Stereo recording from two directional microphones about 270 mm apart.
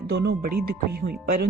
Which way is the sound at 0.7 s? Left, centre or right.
Right.